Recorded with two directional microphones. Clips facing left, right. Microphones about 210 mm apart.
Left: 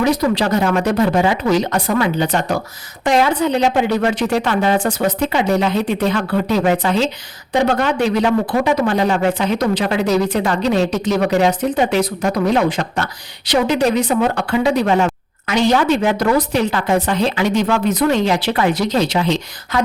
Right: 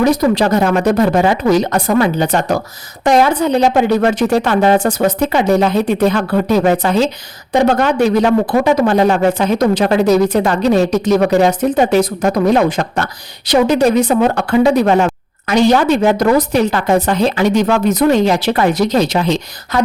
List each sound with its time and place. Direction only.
0.0 s speech: 45° right (ahead or behind)